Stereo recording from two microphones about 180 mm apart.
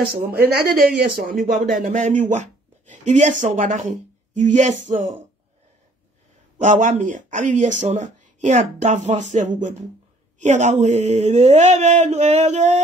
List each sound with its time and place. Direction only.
0.1 s speech: 60° right (ahead or behind); by 5.2 s 40° right (ahead or behind)
6.6 s speech: 40° right (ahead or behind)